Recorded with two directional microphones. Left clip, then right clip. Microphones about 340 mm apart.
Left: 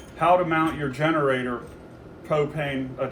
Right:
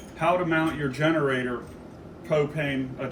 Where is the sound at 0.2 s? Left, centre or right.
Centre.